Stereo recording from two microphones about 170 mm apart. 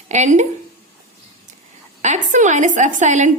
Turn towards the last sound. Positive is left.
turn(degrees=-45)  # may be behind; listen again after turning